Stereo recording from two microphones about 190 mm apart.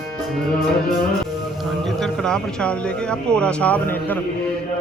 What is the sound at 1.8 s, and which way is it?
A man's voice, centre (ahead or behind).